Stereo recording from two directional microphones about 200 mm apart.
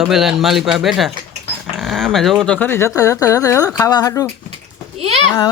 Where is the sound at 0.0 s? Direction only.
Centre (ahead or behind); by 4.3 s 15° left (ahead or behind).